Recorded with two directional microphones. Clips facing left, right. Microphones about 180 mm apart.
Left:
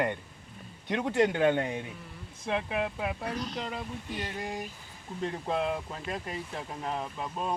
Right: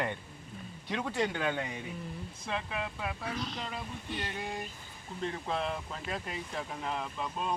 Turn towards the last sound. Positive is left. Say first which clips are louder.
# left 1 dB
turn(degrees=10)  # may be behind; listen again after turning